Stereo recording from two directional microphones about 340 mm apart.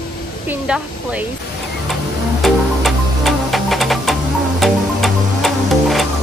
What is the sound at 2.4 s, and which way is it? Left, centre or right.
Music, centre.